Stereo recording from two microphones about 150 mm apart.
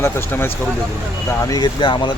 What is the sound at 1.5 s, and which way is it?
Speech, 30° left (ahead or behind).